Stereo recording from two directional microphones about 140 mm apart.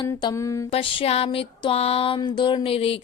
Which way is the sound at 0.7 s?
40° left (ahead or behind).